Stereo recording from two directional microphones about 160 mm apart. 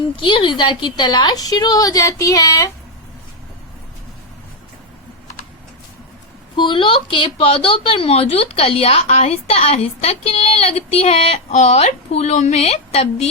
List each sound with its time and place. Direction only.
0.2 s a woman's voice: 30° left (ahead or behind)
6.6 s speech: 30° left (ahead or behind)